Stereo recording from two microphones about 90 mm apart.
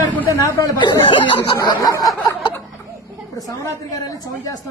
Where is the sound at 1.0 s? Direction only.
60° left (ahead or behind).